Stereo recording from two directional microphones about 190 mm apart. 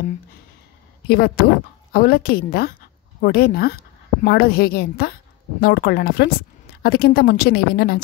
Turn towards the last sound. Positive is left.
turn(degrees=55)  # may be behind; listen again after turning